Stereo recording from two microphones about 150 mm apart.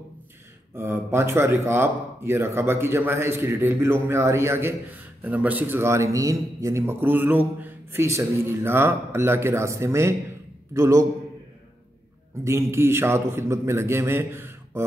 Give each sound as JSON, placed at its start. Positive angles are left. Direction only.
{"t": 0.7, "sound": "a man's voice", "side_deg": -15}
{"t": 12.4, "sound": "speech", "side_deg": -20}